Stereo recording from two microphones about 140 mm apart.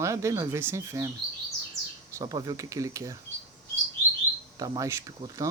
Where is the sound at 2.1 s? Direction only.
25° right (ahead or behind).